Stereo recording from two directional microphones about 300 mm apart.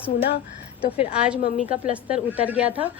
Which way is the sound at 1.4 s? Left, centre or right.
Left.